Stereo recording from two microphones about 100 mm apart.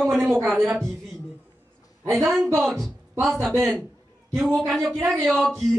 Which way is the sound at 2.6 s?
5° left (ahead or behind).